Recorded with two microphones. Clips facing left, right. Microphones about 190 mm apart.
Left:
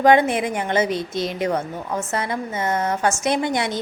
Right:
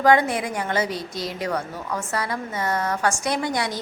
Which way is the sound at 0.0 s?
20° left (ahead or behind).